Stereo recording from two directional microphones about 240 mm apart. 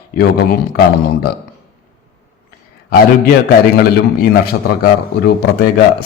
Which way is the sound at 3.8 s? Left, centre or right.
Left.